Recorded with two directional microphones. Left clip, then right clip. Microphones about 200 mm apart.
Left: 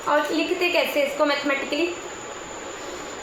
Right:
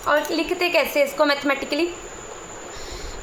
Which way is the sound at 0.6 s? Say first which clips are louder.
Right 3 dB; 25° right (ahead or behind).